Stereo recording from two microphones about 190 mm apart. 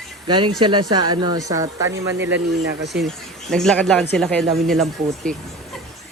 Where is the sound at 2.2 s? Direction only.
70° right (ahead or behind).